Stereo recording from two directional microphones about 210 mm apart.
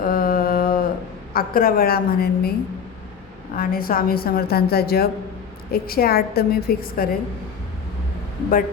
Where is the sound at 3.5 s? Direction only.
45° left (ahead or behind).